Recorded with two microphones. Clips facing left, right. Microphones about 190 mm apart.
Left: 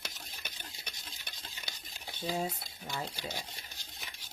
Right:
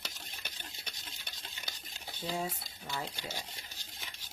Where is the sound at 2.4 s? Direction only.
20° left (ahead or behind).